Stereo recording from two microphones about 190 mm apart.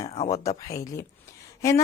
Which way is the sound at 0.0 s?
35° left (ahead or behind).